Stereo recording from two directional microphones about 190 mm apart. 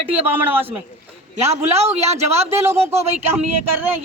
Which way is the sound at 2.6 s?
15° right (ahead or behind).